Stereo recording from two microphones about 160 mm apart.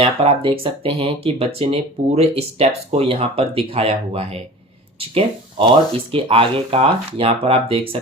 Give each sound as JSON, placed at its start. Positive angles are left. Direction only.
{"t": 0.0, "sound": "speech", "side_deg": -35}